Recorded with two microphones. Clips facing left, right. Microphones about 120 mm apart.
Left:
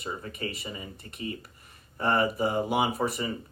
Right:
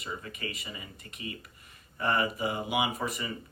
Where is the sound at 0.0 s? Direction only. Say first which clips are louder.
Left 4 dB; 35° left (ahead or behind).